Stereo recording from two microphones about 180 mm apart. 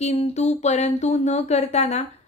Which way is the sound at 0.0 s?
35° left (ahead or behind).